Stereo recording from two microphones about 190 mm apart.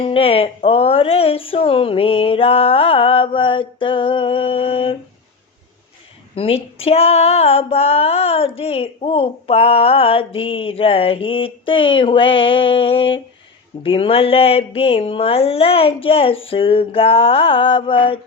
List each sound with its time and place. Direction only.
0.0 s female singing: 30° left (ahead or behind)
6.3 s female singing: 30° left (ahead or behind)
13.8 s a sound: 30° left (ahead or behind)
16.5 s female singing: 30° left (ahead or behind)